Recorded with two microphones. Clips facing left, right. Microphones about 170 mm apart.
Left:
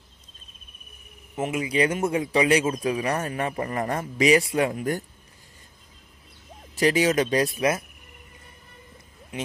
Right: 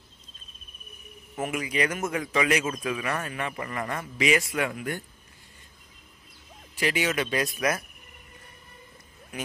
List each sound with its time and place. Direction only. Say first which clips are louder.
1.3 s a man's voice: left 4 dB; 25° left (ahead or behind)
6.7 s a man's voice: left 6 dB; 40° left (ahead or behind)
7.5 s speech: left 4 dB; 25° left (ahead or behind)
9.3 s speech: left 3 dB; 25° left (ahead or behind)